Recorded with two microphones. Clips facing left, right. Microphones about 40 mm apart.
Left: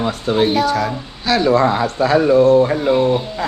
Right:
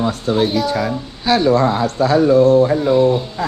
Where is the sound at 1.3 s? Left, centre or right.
Centre.